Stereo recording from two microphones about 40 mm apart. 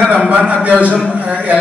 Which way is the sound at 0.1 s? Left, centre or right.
Right.